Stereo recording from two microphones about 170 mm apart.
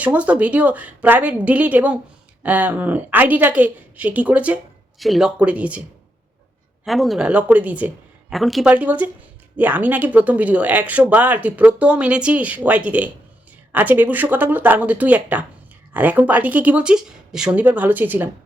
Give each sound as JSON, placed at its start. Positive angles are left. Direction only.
{"t": 0.0, "sound": "speech", "side_deg": -10}
{"t": 6.8, "sound": "speech", "side_deg": 0}